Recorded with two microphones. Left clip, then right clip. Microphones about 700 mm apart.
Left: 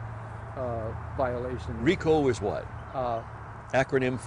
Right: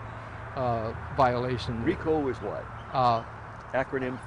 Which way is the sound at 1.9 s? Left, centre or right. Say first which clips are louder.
Left 4 dB; left.